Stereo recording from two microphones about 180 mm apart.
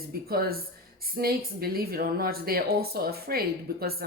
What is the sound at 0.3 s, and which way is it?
A woman's voice, 55° right (ahead or behind).